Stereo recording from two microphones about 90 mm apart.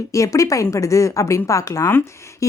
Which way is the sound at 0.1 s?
35° left (ahead or behind).